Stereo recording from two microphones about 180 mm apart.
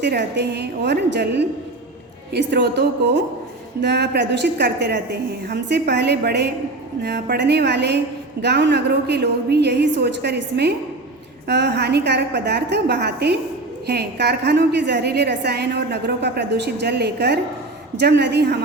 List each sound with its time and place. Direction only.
0.0 s a woman's voice: 65° right (ahead or behind)